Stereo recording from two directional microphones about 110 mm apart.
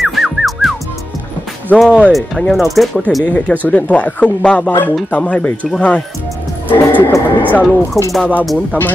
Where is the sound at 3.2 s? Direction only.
10° left (ahead or behind).